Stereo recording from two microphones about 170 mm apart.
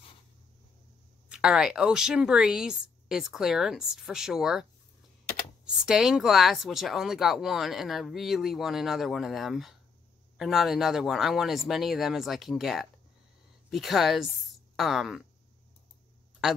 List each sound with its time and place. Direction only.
1.3 s speech: 5° right (ahead or behind)
5.8 s speech: 5° right (ahead or behind)